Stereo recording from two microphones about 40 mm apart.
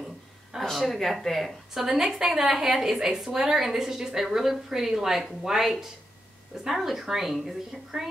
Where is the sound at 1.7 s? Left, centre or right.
Centre.